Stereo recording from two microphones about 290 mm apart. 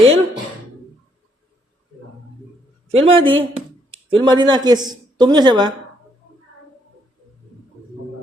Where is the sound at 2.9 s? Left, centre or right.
Centre.